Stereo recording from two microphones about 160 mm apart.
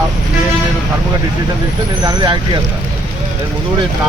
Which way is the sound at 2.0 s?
25° right (ahead or behind).